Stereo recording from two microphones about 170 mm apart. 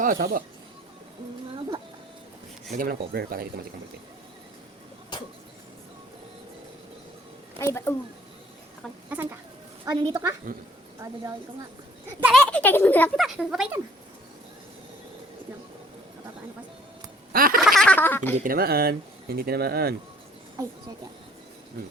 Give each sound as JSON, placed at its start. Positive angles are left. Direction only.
{"t": 0.0, "sound": "speech", "side_deg": -55}
{"t": 2.7, "sound": "speech", "side_deg": -60}
{"t": 7.6, "sound": "speech", "side_deg": 15}
{"t": 9.1, "sound": "speech", "side_deg": -10}
{"t": 9.8, "sound": "a woman's voice", "side_deg": -25}
{"t": 12.3, "sound": "speech", "side_deg": 5}
{"t": 13.2, "sound": "speech", "side_deg": 0}
{"t": 17.3, "sound": "speech", "side_deg": -60}
{"t": 17.6, "sound": "a sound", "side_deg": 0}
{"t": 18.3, "sound": "speech", "side_deg": -55}
{"t": 20.6, "sound": "a woman's voice", "side_deg": -20}